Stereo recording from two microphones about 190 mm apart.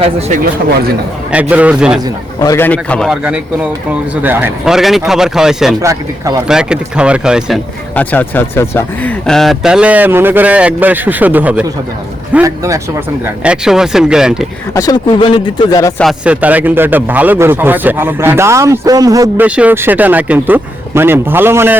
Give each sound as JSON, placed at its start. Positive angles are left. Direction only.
{"t": 1.3, "sound": "speech", "side_deg": -5}
{"t": 2.4, "sound": "a man's voice", "side_deg": 15}
{"t": 3.2, "sound": "a man's voice", "side_deg": -5}
{"t": 5.8, "sound": "speech", "side_deg": -15}
{"t": 6.5, "sound": "a man's voice", "side_deg": -5}
{"t": 7.9, "sound": "speech", "side_deg": 10}
{"t": 13.2, "sound": "a man's voice", "side_deg": -5}
{"t": 14.7, "sound": "speech", "side_deg": 20}
{"t": 16.0, "sound": "speech", "side_deg": -5}
{"t": 19.5, "sound": "speech", "side_deg": -5}